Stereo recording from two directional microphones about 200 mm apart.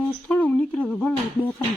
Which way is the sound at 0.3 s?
5° left (ahead or behind).